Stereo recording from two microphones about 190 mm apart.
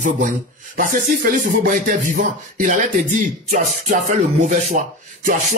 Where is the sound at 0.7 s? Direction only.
45° right (ahead or behind).